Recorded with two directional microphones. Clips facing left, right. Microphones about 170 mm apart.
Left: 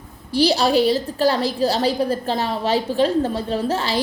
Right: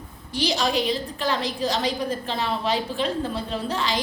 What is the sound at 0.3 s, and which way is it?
A woman's voice, 35° left (ahead or behind).